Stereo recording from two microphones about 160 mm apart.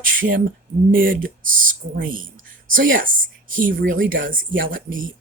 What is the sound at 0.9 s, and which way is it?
Speech, 60° right (ahead or behind).